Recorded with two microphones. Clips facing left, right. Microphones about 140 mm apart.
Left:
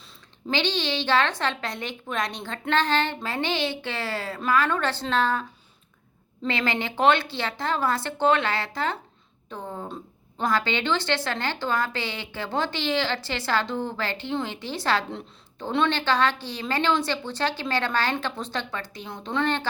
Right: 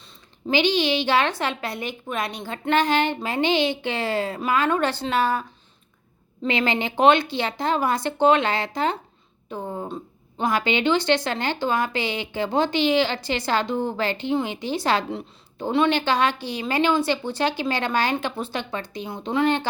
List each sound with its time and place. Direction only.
0.5 s a woman's voice: 10° right (ahead or behind)
6.5 s a woman's voice: 20° right (ahead or behind)
9.9 s a sound: centre (ahead or behind)
10.5 s a woman's voice: 15° right (ahead or behind)